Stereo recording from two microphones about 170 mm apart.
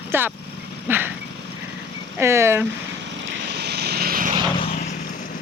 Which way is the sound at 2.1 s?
15° right (ahead or behind).